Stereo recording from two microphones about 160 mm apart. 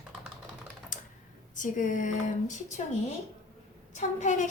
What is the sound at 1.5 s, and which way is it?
A woman's voice, 55° left (ahead or behind).